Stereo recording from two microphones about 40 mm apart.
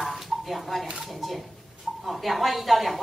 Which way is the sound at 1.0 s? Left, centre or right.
Centre.